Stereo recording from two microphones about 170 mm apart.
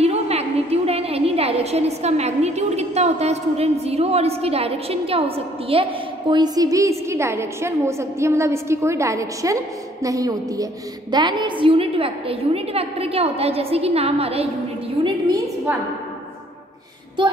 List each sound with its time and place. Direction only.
0.0 s a woman's voice: 40° right (ahead or behind)
15.0 s a woman's voice: 25° right (ahead or behind)